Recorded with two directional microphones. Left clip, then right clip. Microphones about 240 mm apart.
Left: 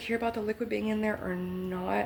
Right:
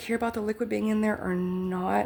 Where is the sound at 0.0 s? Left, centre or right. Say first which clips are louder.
Right 2 dB; right.